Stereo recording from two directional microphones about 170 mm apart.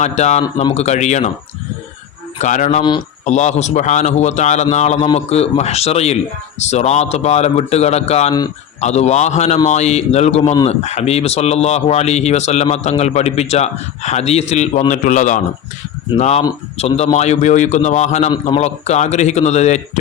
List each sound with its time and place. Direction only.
0.0 s a man's voice: 40° left (ahead or behind)
2.4 s a man's voice: 45° left (ahead or behind)